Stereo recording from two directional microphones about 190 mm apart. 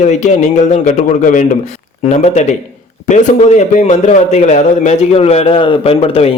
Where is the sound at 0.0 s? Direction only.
35° left (ahead or behind).